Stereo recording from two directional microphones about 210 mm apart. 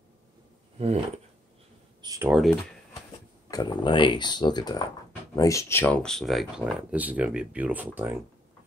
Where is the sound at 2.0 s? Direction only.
15° right (ahead or behind).